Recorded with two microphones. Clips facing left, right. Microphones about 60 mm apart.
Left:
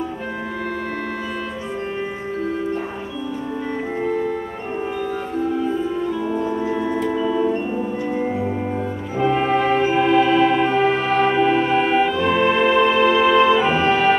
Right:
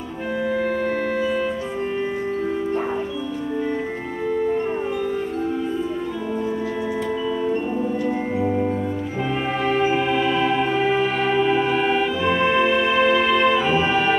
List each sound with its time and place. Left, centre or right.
9.2 s music: centre